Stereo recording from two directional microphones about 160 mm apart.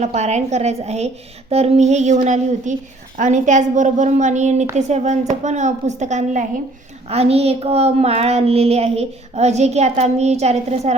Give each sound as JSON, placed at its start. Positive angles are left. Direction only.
{"t": 0.0, "sound": "a woman's voice", "side_deg": -45}